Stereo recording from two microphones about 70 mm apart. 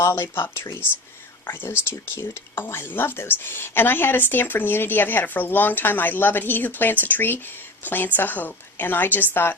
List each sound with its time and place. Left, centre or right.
0.0 s speech: left